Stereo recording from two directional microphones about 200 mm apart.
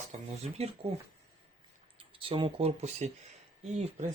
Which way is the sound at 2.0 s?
25° right (ahead or behind).